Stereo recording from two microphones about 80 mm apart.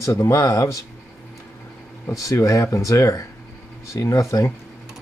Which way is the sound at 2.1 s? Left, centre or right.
Left.